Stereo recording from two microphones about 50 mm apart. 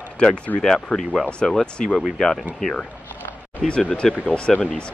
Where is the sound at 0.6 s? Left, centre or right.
Centre.